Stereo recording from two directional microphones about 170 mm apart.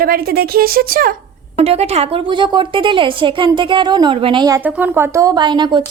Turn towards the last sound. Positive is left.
turn(degrees=-25)  # may be behind; listen again after turning